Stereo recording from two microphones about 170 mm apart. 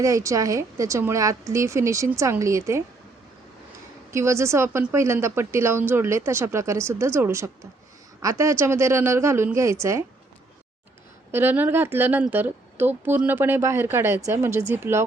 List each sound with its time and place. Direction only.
0.0 s speech: 20° right (ahead or behind)
4.1 s speech: 15° right (ahead or behind)
11.3 s speech: 15° right (ahead or behind)